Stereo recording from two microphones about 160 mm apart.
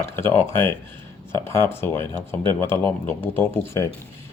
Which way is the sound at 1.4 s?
15° left (ahead or behind).